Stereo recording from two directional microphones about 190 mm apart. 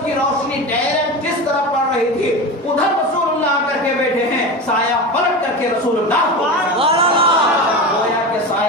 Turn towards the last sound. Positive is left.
turn(degrees=-30)  # may be behind; listen again after turning